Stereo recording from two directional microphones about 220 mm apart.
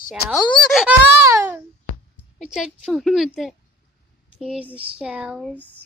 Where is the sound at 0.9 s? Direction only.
5° right (ahead or behind).